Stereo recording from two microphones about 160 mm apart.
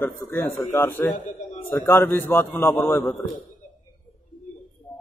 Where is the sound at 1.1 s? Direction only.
50° left (ahead or behind).